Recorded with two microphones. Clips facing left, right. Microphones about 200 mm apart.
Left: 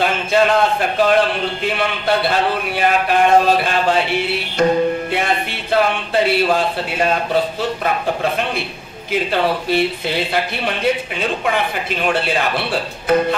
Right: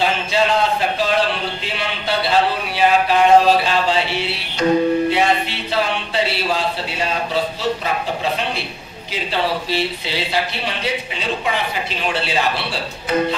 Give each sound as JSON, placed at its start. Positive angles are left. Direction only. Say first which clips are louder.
{"t": 0.0, "sound": "a man's voice", "louder": "left 3 dB", "side_deg": 55}